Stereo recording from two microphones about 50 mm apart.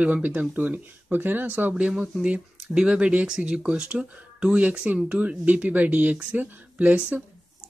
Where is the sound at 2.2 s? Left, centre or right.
Centre; by 7.3 s right.